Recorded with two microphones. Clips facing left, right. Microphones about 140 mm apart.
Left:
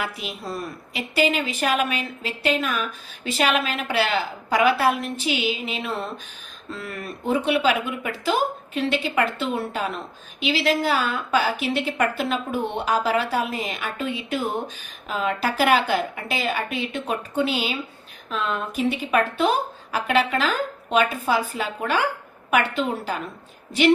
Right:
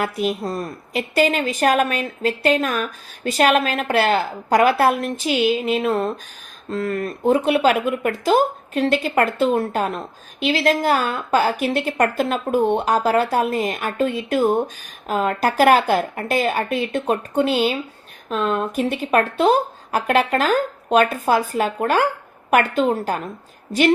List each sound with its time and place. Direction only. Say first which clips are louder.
0.0 s speech: right 9 dB; 45° right (ahead or behind)